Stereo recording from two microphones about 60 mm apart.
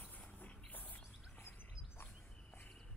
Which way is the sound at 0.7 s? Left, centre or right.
Left.